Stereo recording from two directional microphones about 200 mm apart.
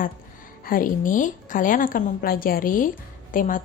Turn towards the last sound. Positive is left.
turn(degrees=40)  # may be behind; listen again after turning